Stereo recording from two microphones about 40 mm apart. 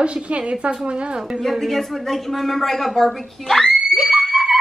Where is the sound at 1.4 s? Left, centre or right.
Centre.